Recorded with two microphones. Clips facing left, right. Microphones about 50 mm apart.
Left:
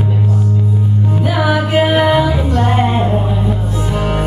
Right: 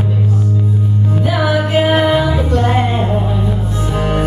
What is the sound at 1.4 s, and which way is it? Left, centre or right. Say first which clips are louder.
Music: left 1 dB; centre.